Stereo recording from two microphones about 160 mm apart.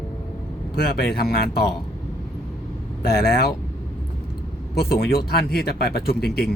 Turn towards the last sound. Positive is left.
turn(degrees=80)